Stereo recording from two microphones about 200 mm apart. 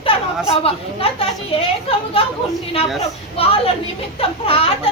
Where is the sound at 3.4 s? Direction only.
30° left (ahead or behind).